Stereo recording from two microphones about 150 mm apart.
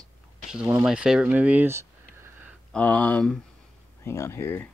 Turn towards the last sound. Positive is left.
turn(degrees=15)  # may be behind; listen again after turning